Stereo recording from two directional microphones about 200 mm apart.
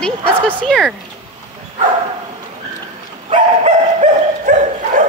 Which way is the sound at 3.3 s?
35° right (ahead or behind).